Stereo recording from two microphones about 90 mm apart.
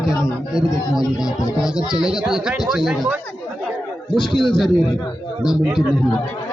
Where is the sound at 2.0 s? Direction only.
5° right (ahead or behind).